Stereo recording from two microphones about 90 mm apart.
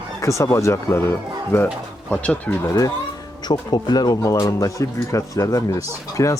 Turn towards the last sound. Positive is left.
turn(degrees=35)  # may be behind; listen again after turning